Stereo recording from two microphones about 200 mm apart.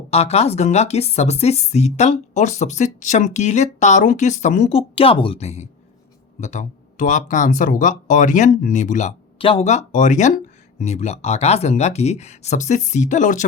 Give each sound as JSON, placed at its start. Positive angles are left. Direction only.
{"t": 0.1, "sound": "speech", "side_deg": 30}